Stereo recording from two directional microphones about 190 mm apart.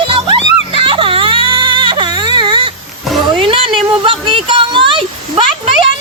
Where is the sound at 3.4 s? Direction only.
25° right (ahead or behind).